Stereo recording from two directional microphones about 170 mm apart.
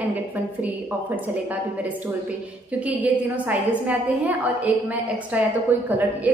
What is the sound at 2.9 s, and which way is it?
A woman's voice, 10° right (ahead or behind).